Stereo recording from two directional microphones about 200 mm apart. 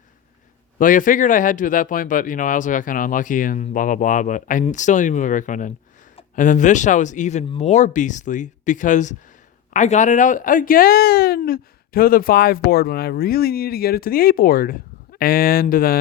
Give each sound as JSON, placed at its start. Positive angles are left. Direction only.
{"t": 0.8, "sound": "a man's voice", "side_deg": 40}